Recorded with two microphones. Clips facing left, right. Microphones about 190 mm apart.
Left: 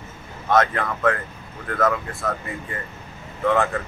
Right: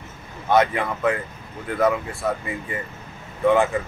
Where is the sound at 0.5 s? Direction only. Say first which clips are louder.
Right 1 dB; centre (ahead or behind).